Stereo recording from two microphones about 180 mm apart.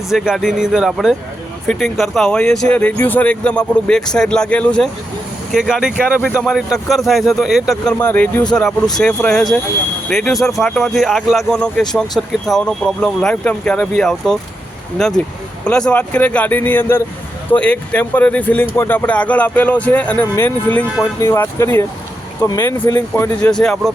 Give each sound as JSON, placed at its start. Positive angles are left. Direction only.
{"t": 0.1, "sound": "speech", "side_deg": 0}